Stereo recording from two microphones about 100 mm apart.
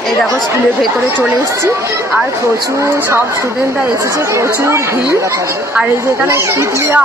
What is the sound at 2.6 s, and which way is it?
Speech, 30° right (ahead or behind).